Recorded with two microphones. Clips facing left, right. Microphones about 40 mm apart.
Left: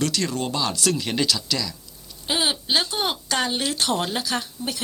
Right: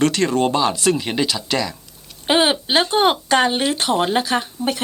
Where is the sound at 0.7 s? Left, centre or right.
Right.